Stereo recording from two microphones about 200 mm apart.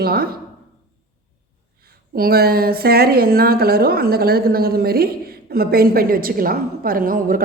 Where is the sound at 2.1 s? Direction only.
50° right (ahead or behind).